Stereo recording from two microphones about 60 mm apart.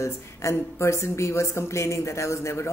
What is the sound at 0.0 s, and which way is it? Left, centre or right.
A woman's voice, left.